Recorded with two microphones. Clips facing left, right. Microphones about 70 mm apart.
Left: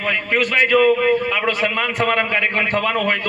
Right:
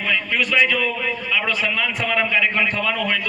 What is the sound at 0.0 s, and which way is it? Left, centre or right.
A man's voice, left.